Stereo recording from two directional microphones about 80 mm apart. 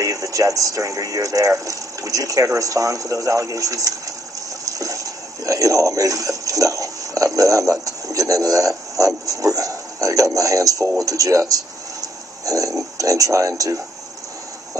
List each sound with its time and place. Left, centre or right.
0.0 s speech: right